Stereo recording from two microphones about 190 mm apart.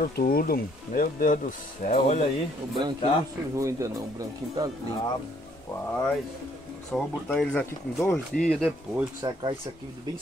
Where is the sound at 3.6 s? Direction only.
15° right (ahead or behind).